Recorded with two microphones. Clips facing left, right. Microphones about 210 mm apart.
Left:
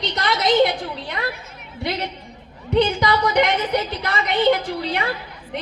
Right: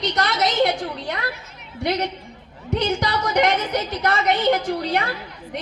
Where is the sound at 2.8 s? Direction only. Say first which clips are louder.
Left 2 dB; 45° right (ahead or behind).